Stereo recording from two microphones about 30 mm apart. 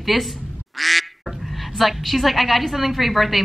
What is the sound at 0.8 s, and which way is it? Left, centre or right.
Quack, centre.